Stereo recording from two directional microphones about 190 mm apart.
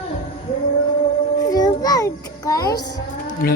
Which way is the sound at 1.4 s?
20° left (ahead or behind).